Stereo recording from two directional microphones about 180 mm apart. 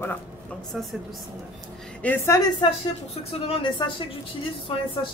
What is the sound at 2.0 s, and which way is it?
Speech, 10° left (ahead or behind).